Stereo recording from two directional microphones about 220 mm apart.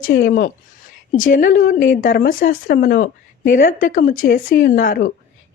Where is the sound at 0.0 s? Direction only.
45° left (ahead or behind).